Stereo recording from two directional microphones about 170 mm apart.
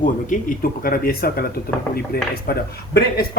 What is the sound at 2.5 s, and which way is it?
Speech, 75° left (ahead or behind).